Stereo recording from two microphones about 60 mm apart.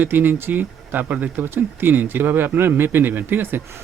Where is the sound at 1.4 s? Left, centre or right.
Right.